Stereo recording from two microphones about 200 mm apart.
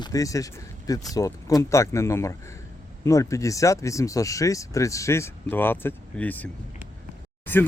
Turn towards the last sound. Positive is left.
turn(degrees=10)  # may be behind; listen again after turning